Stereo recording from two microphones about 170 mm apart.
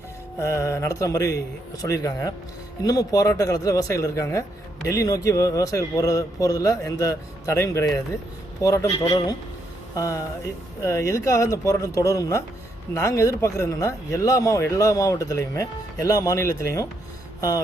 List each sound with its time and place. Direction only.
0.3 s speech: 15° left (ahead or behind)